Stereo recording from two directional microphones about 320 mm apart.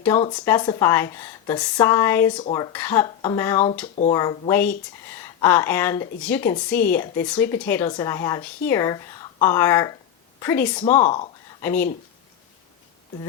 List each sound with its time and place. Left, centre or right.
0.0 s a woman's voice: centre
10.8 s speech: left
11.6 s a woman's voice: centre